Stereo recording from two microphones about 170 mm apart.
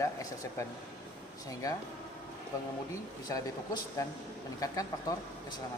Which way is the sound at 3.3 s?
20° left (ahead or behind).